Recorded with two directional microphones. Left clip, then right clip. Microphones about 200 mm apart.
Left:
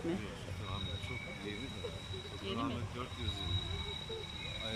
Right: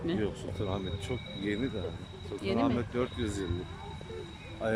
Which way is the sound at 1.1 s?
50° right (ahead or behind).